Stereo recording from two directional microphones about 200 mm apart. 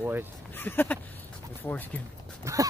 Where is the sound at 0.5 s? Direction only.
10° left (ahead or behind).